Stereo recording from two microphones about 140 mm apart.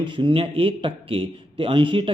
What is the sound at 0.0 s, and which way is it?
Speech, 40° right (ahead or behind).